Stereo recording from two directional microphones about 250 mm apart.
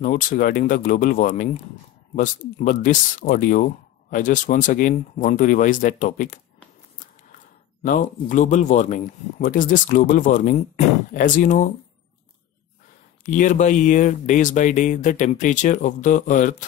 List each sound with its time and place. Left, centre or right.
0.0 s speech: left
7.8 s speech: left
13.2 s speech: left